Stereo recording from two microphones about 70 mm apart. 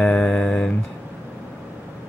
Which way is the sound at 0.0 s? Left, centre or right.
Centre.